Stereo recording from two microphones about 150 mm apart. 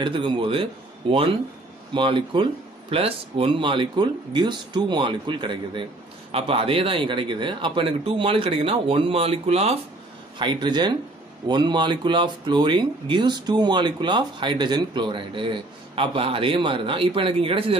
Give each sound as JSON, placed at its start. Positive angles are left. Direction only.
{"t": 0.0, "sound": "speech", "side_deg": -35}
{"t": 10.4, "sound": "speech", "side_deg": -30}